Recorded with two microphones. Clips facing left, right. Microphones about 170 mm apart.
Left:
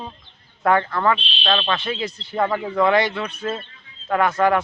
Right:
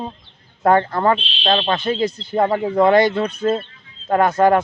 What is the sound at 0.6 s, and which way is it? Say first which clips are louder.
Speech: right 3 dB; 35° right (ahead or behind).